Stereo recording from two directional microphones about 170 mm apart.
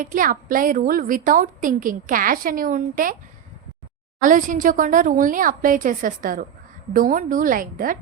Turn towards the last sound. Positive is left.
turn(degrees=-55)  # may be behind; listen again after turning